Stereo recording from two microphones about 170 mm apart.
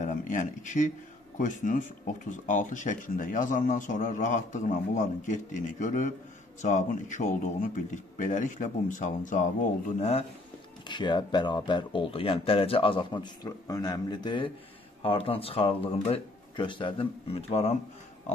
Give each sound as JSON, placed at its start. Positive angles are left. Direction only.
{"t": 0.0, "sound": "speech", "side_deg": 50}
{"t": 10.8, "sound": "speech", "side_deg": 25}